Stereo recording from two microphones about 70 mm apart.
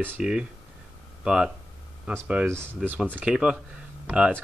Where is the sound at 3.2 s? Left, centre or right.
Centre.